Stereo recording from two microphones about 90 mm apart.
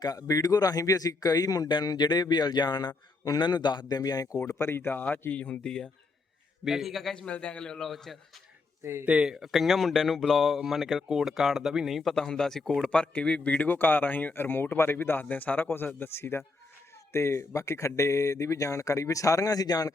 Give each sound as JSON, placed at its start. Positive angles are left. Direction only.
{"t": 0.0, "sound": "speech", "side_deg": 45}
{"t": 4.5, "sound": "speech", "side_deg": 30}
{"t": 6.7, "sound": "a man's voice", "side_deg": 0}
{"t": 8.8, "sound": "speech", "side_deg": -30}
{"t": 9.0, "sound": "speech", "side_deg": -10}